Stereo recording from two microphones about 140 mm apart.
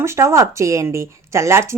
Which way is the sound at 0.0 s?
20° right (ahead or behind).